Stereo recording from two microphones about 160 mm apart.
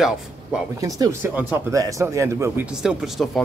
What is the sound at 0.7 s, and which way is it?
Speech, 20° right (ahead or behind).